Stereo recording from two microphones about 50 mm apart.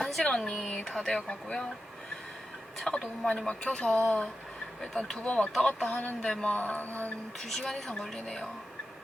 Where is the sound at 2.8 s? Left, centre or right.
Centre; by 7.1 s left.